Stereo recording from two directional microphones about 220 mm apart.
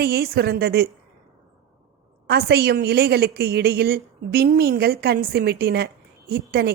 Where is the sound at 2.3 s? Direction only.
45° right (ahead or behind).